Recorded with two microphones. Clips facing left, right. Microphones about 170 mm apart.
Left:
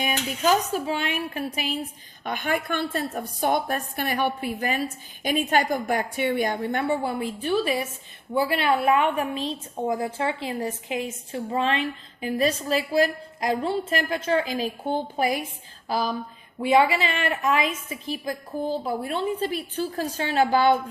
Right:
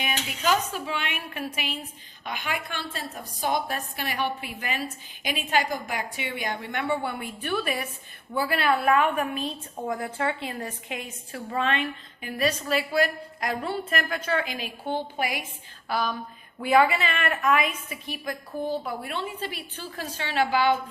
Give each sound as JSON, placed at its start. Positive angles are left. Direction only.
{"t": 0.0, "sound": "speech", "side_deg": 40}
{"t": 2.2, "sound": "a woman's voice", "side_deg": 50}
{"t": 16.6, "sound": "a woman's voice", "side_deg": 25}